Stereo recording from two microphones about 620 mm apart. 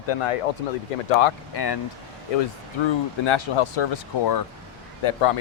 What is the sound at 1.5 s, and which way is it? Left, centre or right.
Speech, left.